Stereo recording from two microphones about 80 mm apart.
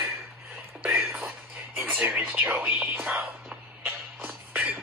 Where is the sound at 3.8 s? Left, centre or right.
Right.